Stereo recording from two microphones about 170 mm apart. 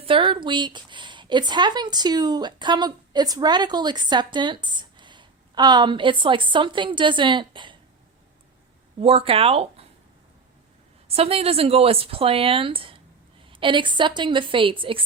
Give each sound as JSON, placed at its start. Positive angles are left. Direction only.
{"t": 0.0, "sound": "speech", "side_deg": -30}
{"t": 9.0, "sound": "speech", "side_deg": -35}
{"t": 11.1, "sound": "speech", "side_deg": -35}